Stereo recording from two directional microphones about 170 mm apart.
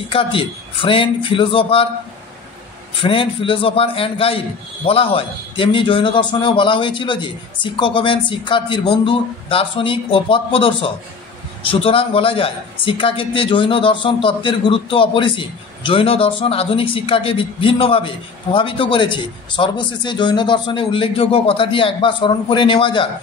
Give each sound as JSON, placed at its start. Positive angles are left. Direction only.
{"t": 0.1, "sound": "a man's voice", "side_deg": 30}
{"t": 3.0, "sound": "a man's voice", "side_deg": 30}